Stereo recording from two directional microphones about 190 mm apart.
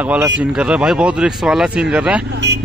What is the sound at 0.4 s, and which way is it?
Speech, 5° right (ahead or behind).